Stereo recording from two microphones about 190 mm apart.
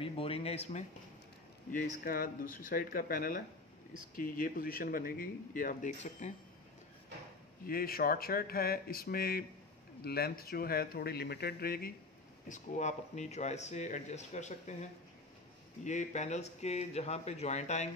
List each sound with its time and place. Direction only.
0.0 s speech: 30° left (ahead or behind)
2.0 s speech: 50° left (ahead or behind)
7.6 s speech: 50° left (ahead or behind)
12.4 s speech: 40° left (ahead or behind)